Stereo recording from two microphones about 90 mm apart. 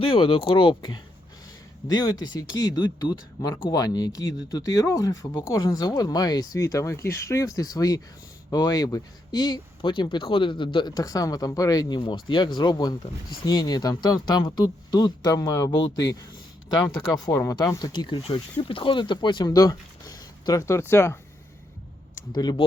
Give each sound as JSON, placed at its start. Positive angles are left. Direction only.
{"t": 0.0, "sound": "speech", "side_deg": 80}
{"t": 1.9, "sound": "speech", "side_deg": 45}
{"t": 10.9, "sound": "speech", "side_deg": 45}
{"t": 11.9, "sound": "speech", "side_deg": 60}
{"t": 17.9, "sound": "speech", "side_deg": 55}
{"t": 18.7, "sound": "speech", "side_deg": 70}
{"t": 19.5, "sound": "speech", "side_deg": 40}
{"t": 22.3, "sound": "speech", "side_deg": 50}